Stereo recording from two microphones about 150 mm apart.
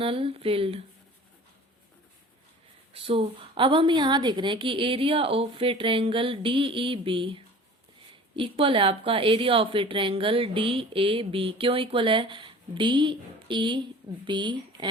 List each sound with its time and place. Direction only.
0.0 s a woman's voice: 40° right (ahead or behind)
2.9 s a woman's voice: 35° right (ahead or behind)